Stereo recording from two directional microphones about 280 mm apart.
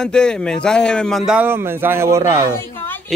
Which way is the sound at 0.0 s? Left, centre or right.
Centre.